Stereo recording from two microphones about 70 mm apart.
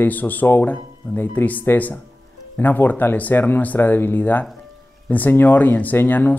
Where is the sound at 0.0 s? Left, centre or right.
Left.